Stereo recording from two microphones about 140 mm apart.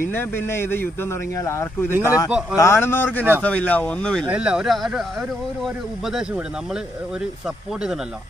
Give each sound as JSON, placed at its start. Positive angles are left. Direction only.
{"t": 0.1, "sound": "speech", "side_deg": 15}
{"t": 1.9, "sound": "speech", "side_deg": -15}
{"t": 2.5, "sound": "speech", "side_deg": 20}
{"t": 4.3, "sound": "speech", "side_deg": -5}
{"t": 6.0, "sound": "speech", "side_deg": -5}